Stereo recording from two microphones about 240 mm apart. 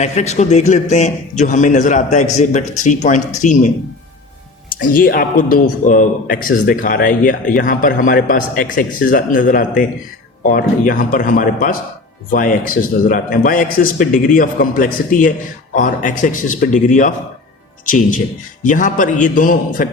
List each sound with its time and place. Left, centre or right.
0.0 s a man's voice: left
4.8 s speech: left